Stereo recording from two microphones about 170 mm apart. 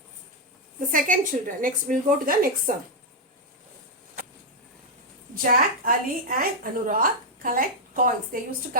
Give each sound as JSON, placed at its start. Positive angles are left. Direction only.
{"t": 0.9, "sound": "a woman's voice", "side_deg": -50}
{"t": 5.3, "sound": "a woman's voice", "side_deg": -55}